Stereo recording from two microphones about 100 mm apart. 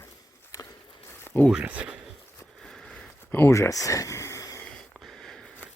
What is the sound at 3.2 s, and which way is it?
Speech, 20° left (ahead or behind).